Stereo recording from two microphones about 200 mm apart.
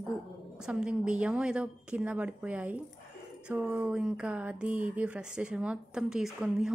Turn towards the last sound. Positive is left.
turn(degrees=-5)  # may be behind; listen again after turning